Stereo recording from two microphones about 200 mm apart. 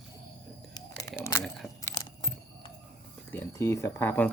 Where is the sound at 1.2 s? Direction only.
15° left (ahead or behind).